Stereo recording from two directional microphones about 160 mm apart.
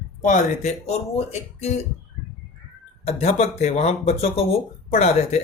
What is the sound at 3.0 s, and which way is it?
Speech, 40° left (ahead or behind).